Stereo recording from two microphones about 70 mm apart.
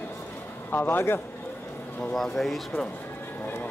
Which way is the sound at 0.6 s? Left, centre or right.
Left.